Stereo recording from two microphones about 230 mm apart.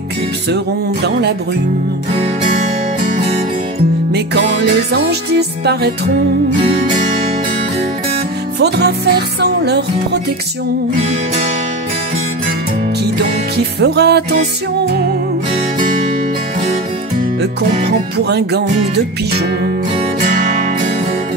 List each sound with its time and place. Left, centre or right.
4.1 s music: right
5.7 s music: right
8.5 s music: right
13.7 s music: right
18.3 s music: right